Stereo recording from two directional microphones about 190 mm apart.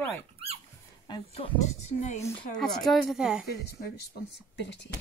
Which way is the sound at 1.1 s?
30° left (ahead or behind).